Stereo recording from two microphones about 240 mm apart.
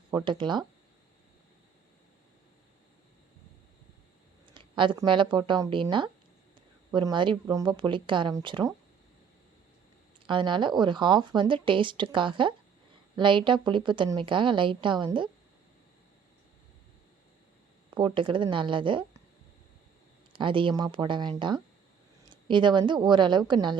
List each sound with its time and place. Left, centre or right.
0.1 s a woman's voice: centre
4.4 s a woman's voice: centre
10.2 s a woman's voice: centre
17.9 s a woman's voice: centre
20.3 s a woman's voice: right